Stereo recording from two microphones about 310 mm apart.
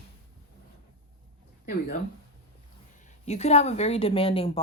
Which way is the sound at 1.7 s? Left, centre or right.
Left.